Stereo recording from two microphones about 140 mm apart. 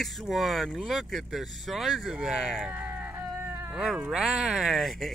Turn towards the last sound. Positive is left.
turn(degrees=0)  # may be behind; listen again after turning